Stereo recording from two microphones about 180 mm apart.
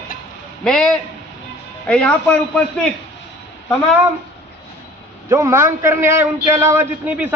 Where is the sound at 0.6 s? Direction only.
5° left (ahead or behind).